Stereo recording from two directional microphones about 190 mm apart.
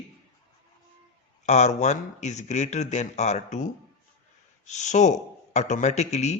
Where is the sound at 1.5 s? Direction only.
35° left (ahead or behind).